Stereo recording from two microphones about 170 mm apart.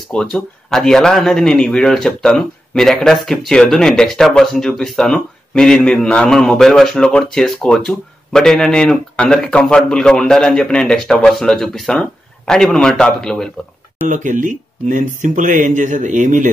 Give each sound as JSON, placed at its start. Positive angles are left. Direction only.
{"t": 0.1, "sound": "speech", "side_deg": 5}
{"t": 14.0, "sound": "speech", "side_deg": -50}